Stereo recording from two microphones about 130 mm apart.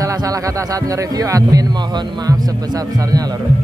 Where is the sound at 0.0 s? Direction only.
25° right (ahead or behind).